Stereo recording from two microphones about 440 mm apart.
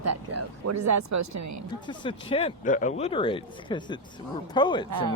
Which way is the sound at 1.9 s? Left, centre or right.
Centre.